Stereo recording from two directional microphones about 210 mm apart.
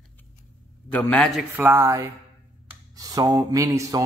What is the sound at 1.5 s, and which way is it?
Speech, 10° right (ahead or behind).